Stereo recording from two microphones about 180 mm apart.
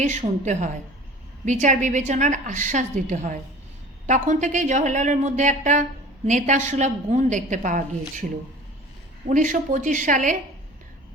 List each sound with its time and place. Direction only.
0.0 s a woman's voice: 40° right (ahead or behind)